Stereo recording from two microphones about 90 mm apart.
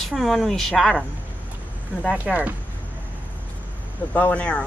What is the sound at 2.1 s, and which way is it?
Speech, 15° right (ahead or behind).